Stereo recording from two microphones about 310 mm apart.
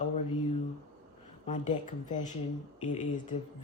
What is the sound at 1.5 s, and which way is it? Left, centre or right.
Speech, left.